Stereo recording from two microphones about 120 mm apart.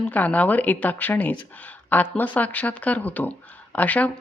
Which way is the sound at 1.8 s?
15° left (ahead or behind).